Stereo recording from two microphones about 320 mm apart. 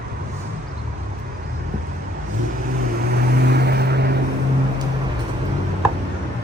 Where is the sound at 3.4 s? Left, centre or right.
Right.